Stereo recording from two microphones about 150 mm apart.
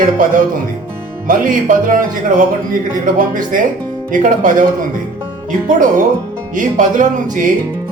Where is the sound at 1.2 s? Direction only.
60° right (ahead or behind).